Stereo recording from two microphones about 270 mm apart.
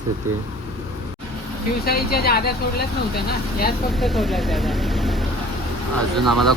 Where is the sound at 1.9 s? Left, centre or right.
Left.